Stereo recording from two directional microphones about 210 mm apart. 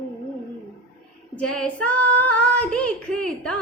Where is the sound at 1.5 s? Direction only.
5° left (ahead or behind).